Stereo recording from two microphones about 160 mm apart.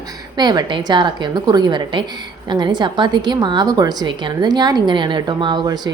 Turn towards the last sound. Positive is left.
turn(degrees=-30)  # may be behind; listen again after turning